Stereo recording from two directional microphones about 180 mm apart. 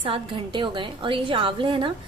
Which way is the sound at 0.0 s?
25° right (ahead or behind).